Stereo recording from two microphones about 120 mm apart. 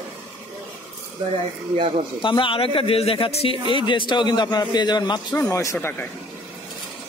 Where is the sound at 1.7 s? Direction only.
50° right (ahead or behind).